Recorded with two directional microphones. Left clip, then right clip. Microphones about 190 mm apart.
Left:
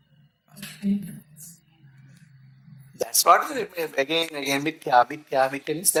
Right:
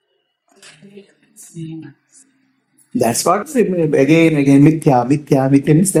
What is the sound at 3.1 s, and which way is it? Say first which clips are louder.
Speech: even; 15° left (ahead or behind).